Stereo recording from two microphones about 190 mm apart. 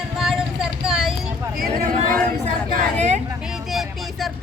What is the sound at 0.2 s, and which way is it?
Vehicle, centre (ahead or behind).